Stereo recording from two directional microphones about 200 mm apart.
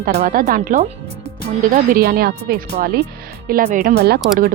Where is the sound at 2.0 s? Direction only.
55° right (ahead or behind).